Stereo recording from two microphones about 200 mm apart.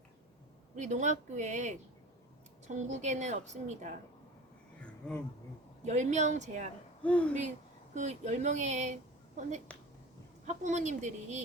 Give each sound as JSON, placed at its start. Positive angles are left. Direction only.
{"t": 0.8, "sound": "a woman's voice", "side_deg": -35}
{"t": 4.8, "sound": "a sound", "side_deg": 5}
{"t": 5.8, "sound": "a woman's voice", "side_deg": -35}
{"t": 7.0, "sound": "speech", "side_deg": 5}
{"t": 7.9, "sound": "a woman's voice", "side_deg": -35}
{"t": 9.7, "sound": "a sound", "side_deg": 5}
{"t": 10.4, "sound": "a woman's voice", "side_deg": -35}